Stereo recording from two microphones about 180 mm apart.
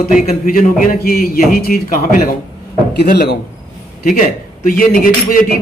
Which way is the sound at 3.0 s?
65° left (ahead or behind).